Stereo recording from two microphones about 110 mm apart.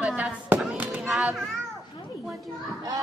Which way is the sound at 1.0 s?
Centre (ahead or behind).